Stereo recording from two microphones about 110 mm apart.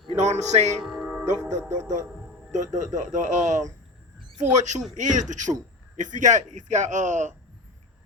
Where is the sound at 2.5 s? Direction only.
90° right.